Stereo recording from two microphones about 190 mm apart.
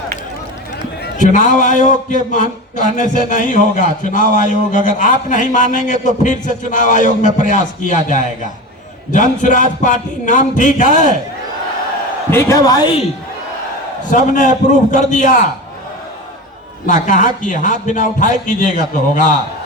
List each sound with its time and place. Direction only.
1.2 s a man's voice: 40° left (ahead or behind)
12.3 s speech: 15° left (ahead or behind)
14.1 s a man's voice: 45° left (ahead or behind)
16.8 s a man's voice: 40° left (ahead or behind)